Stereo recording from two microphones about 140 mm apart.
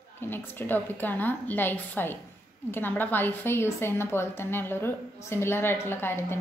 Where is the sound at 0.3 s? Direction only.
15° left (ahead or behind).